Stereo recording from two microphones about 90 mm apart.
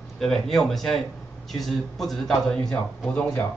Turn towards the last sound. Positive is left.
turn(degrees=10)  # may be behind; listen again after turning